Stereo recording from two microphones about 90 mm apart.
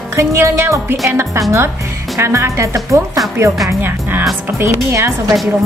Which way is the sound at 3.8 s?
20° right (ahead or behind).